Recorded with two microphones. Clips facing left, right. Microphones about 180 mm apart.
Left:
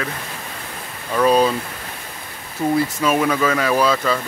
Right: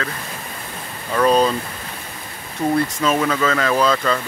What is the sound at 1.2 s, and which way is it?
Speech, 10° left (ahead or behind).